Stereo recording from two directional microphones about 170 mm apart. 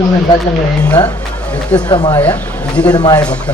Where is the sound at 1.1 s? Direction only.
10° left (ahead or behind).